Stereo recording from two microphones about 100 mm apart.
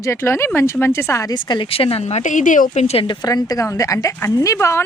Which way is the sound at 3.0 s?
45° left (ahead or behind).